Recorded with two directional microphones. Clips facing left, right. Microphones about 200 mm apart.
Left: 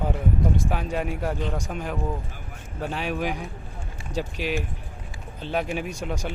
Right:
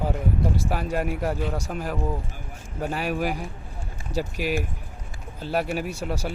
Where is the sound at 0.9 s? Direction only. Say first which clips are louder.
Right 1 dB; 5° right (ahead or behind).